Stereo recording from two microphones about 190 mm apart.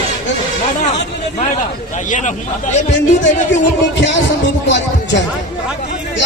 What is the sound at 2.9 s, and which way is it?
Speech, 70° left (ahead or behind).